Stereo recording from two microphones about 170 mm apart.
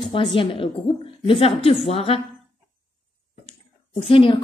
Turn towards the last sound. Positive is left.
turn(degrees=30)  # may be behind; listen again after turning